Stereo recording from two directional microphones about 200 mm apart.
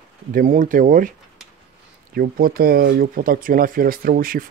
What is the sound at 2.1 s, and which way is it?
Speech, 50° right (ahead or behind).